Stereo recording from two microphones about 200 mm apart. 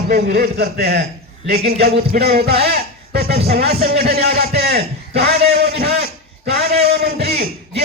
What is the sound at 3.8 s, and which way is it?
Speech, 50° right (ahead or behind).